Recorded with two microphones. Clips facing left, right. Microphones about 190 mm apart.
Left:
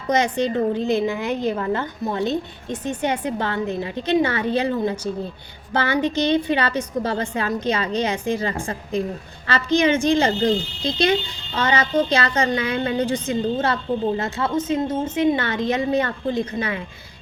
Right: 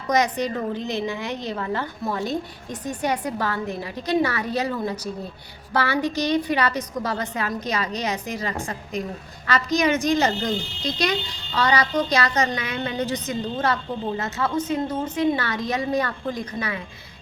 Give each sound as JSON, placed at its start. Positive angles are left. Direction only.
{"t": 0.1, "sound": "a woman's voice", "side_deg": 25}